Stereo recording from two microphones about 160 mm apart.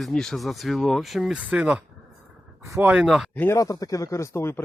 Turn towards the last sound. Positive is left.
turn(degrees=15)  # may be behind; listen again after turning